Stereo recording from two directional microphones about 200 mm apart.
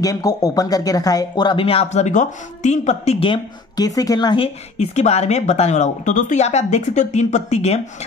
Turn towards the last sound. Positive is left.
turn(degrees=35)  # may be behind; listen again after turning